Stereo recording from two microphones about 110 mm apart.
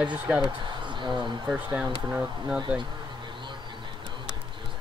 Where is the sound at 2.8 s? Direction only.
45° right (ahead or behind).